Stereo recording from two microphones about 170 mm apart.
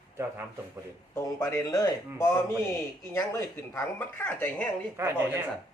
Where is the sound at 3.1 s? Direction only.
15° left (ahead or behind).